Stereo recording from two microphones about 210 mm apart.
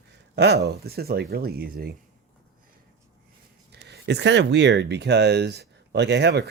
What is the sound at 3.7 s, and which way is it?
Speech, 55° right (ahead or behind).